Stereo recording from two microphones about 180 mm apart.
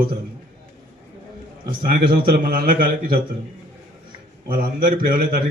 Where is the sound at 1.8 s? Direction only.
55° right (ahead or behind).